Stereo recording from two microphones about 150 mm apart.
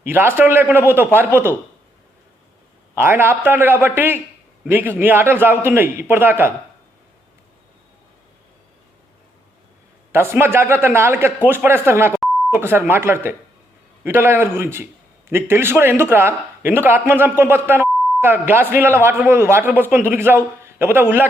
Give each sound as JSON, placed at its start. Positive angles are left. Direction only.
{"t": 0.0, "sound": "speech", "side_deg": -15}
{"t": 2.9, "sound": "speech", "side_deg": -15}
{"t": 10.1, "sound": "speech", "side_deg": -15}